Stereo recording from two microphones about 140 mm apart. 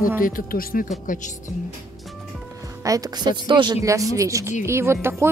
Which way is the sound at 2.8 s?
25° right (ahead or behind).